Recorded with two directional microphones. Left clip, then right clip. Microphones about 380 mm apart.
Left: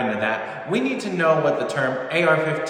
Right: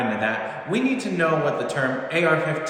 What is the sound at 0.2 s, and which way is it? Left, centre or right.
A man's voice, centre.